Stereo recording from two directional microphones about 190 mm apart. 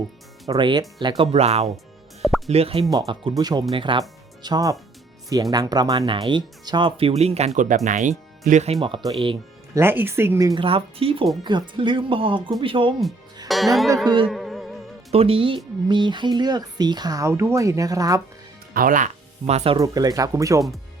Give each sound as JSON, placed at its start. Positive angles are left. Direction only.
{"t": 0.4, "sound": "speech", "side_deg": -20}
{"t": 1.2, "sound": "speech", "side_deg": -35}
{"t": 9.7, "sound": "speech", "side_deg": -10}
{"t": 13.5, "sound": "speech", "side_deg": 0}
{"t": 14.3, "sound": "music", "side_deg": 0}
{"t": 15.1, "sound": "speech", "side_deg": -30}
{"t": 18.7, "sound": "speech", "side_deg": -45}
{"t": 19.8, "sound": "speech", "side_deg": -20}